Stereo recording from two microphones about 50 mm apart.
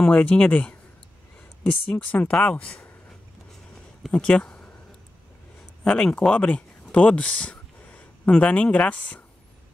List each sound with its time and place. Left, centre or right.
0.0 s speech: left
1.9 s speech: left
4.1 s speech: left
5.9 s speech: left